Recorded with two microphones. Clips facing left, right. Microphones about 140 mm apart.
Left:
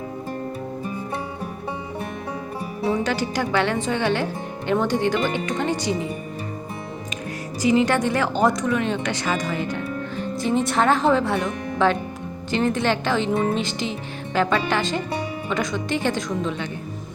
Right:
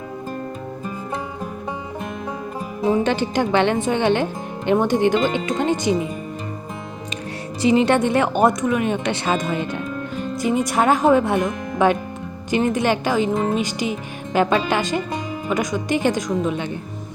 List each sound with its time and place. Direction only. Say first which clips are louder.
2.8 s speech: right 4 dB; 20° right (ahead or behind)
7.6 s speech: right 3 dB; 25° right (ahead or behind)